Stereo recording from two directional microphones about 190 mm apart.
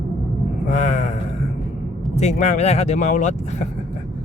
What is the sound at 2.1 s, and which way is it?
Speech, 35° left (ahead or behind).